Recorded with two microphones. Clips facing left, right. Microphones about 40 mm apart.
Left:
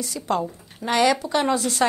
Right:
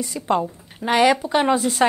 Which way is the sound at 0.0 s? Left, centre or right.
Centre.